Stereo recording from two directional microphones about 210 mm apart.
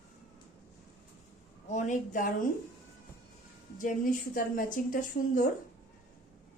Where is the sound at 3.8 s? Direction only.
40° left (ahead or behind).